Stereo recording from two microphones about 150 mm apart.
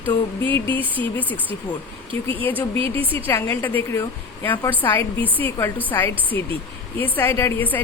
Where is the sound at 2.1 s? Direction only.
35° right (ahead or behind).